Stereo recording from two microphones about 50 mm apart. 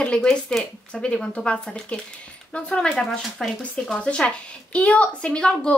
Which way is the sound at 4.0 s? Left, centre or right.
Left.